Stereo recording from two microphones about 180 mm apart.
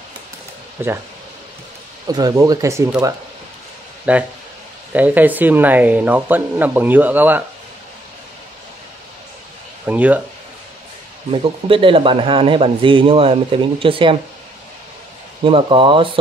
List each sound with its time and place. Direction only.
0.8 s speech: 10° right (ahead or behind)
2.0 s speech: 20° right (ahead or behind)
4.1 s speech: 5° right (ahead or behind)
9.8 s speech: 10° right (ahead or behind)
11.4 s speech: 30° right (ahead or behind)
15.4 s speech: 30° right (ahead or behind)